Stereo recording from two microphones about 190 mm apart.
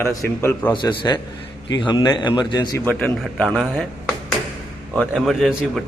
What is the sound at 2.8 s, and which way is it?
A man's voice, 5° left (ahead or behind).